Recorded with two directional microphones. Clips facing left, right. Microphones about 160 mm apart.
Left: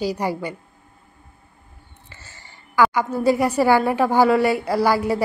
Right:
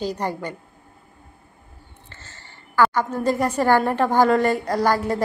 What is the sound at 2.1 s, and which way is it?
A woman's voice, 10° left (ahead or behind).